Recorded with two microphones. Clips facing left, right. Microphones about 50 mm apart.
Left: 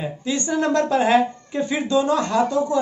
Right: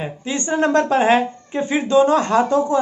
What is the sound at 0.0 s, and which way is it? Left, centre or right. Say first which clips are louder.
Speech: even; right.